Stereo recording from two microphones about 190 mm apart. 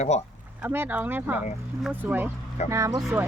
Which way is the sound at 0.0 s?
35° left (ahead or behind).